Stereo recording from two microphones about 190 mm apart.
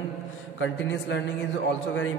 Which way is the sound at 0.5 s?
75° left (ahead or behind).